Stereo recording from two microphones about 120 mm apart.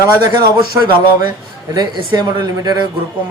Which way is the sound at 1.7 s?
35° right (ahead or behind).